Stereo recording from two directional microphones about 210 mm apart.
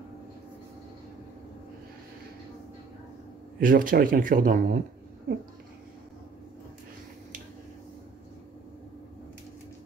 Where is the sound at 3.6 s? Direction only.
40° right (ahead or behind).